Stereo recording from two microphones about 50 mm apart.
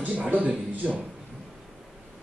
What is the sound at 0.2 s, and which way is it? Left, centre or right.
Speech, right.